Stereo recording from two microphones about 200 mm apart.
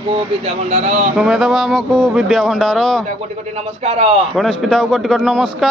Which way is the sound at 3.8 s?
30° right (ahead or behind).